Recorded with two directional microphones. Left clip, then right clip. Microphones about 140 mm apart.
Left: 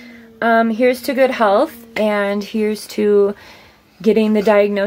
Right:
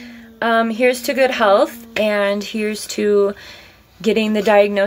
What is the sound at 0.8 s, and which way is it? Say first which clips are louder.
Speech: left 1 dB; 35° left (ahead or behind).